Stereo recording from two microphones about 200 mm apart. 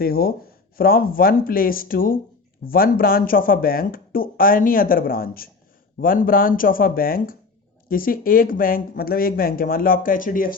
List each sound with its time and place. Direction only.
0.0 s speech: 50° left (ahead or behind)